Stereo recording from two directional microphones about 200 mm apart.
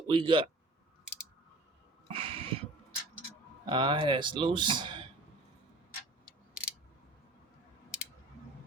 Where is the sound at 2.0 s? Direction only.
25° right (ahead or behind).